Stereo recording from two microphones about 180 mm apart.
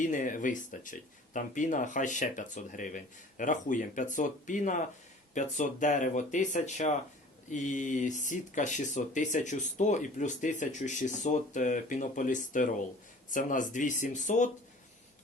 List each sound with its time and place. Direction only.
0.0 s speech: 45° left (ahead or behind)